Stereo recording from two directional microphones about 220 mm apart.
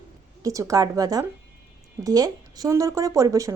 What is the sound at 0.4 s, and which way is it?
A woman's voice, 15° right (ahead or behind).